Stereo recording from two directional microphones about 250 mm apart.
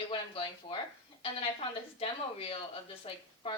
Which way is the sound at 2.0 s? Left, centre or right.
Left.